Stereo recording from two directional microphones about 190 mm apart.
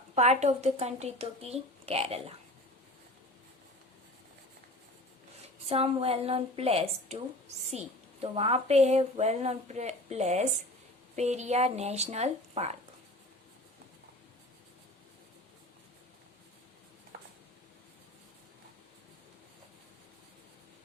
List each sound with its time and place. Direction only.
0.2 s a woman's voice: 35° right (ahead or behind)
5.6 s a woman's voice: 30° right (ahead or behind)